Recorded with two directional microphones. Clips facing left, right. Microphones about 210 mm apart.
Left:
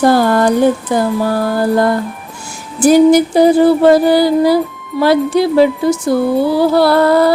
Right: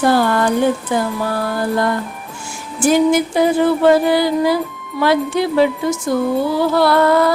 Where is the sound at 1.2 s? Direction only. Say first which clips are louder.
Left 5 dB; 40° left (ahead or behind).